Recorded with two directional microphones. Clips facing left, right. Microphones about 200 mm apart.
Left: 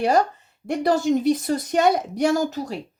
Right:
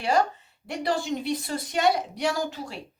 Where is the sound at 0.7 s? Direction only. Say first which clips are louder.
Left 8 dB; 45° left (ahead or behind).